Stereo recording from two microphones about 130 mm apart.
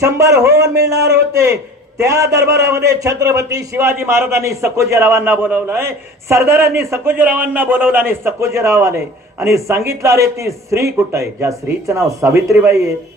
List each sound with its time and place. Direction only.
0.0 s a man's voice: 25° right (ahead or behind)